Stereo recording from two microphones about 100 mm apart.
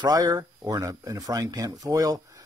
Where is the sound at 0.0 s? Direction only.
35° right (ahead or behind).